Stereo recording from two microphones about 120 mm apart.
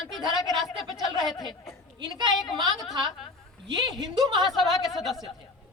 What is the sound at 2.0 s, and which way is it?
Speech, 35° right (ahead or behind).